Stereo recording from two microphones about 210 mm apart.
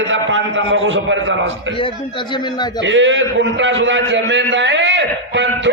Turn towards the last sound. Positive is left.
turn(degrees=-60)  # may be behind; listen again after turning